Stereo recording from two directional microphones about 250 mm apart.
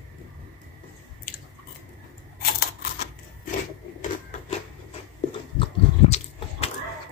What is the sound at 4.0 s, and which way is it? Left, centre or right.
Printer, left.